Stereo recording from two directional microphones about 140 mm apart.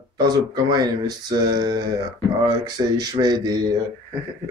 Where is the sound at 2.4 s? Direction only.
30° right (ahead or behind).